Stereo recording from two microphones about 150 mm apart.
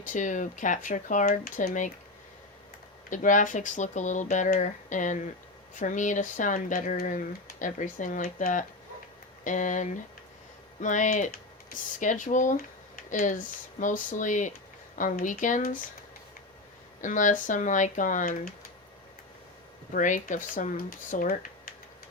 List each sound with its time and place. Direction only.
0.0 s speech: 55° left (ahead or behind)
3.1 s speech: 60° left (ahead or behind)
17.0 s speech: 55° left (ahead or behind)
19.9 s speech: 60° left (ahead or behind)